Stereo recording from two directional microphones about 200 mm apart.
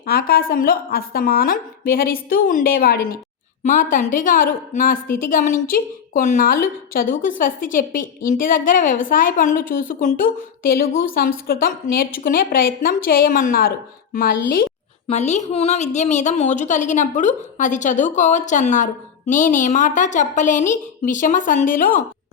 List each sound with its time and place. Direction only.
0.0 s a woman's voice: 50° left (ahead or behind)
3.6 s a woman's voice: 40° left (ahead or behind)
15.0 s a woman's voice: 35° left (ahead or behind)